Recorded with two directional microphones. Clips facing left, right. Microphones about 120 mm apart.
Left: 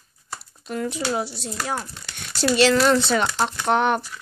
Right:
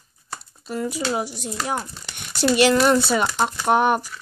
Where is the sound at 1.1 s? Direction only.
15° right (ahead or behind).